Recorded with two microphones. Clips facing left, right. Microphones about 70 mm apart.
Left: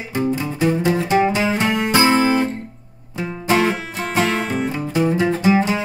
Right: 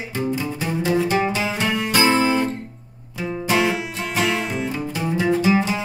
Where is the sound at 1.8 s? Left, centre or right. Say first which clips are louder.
Left 2 dB; left.